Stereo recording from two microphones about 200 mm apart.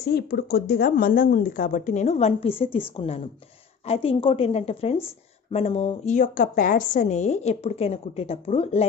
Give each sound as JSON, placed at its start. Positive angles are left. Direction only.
{"t": 0.0, "sound": "speech", "side_deg": 55}
{"t": 3.8, "sound": "a woman's voice", "side_deg": 30}